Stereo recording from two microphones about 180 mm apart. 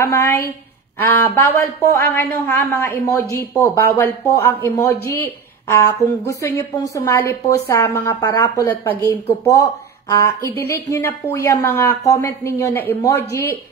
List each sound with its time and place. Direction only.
0.0 s speech: 15° left (ahead or behind)